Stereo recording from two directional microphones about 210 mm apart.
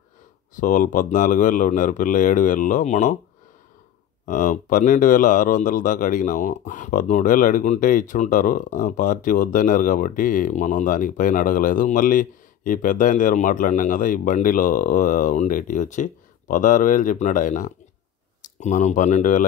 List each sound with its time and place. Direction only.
0.6 s speech: 40° left (ahead or behind)
4.3 s speech: 40° left (ahead or behind)